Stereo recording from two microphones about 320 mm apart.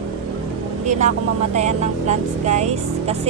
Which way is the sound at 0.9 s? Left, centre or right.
Right.